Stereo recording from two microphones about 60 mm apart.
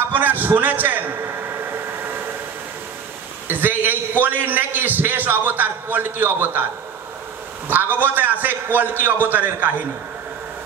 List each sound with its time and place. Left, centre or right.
0.1 s a sound: right
3.4 s a man's voice: right
7.6 s a man's voice: right